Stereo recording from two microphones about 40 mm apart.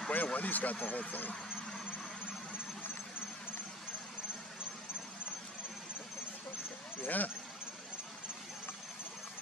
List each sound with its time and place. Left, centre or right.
0.1 s speech: left
7.0 s speech: left